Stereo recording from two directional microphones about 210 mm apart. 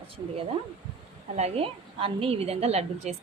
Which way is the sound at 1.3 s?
30° right (ahead or behind).